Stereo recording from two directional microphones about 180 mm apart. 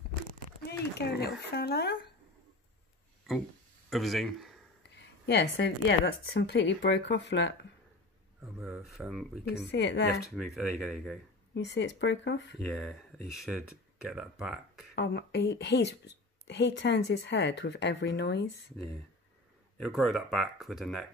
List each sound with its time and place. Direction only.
0.7 s speech: 65° left (ahead or behind)
3.9 s speech: centre (ahead or behind)
4.9 s a woman's voice: 70° left (ahead or behind)
8.4 s speech: centre (ahead or behind)
9.7 s a woman's voice: 75° left (ahead or behind)
10.2 s speech: centre (ahead or behind)
11.5 s speech: 75° left (ahead or behind)
12.5 s speech: centre (ahead or behind)
15.0 s a woman's voice: 70° left (ahead or behind)
19.8 s speech: centre (ahead or behind)